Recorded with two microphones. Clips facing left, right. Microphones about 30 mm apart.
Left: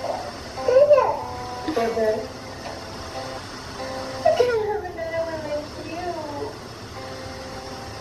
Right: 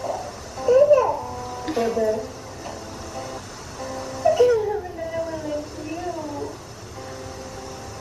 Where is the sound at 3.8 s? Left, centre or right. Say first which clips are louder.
Even; left.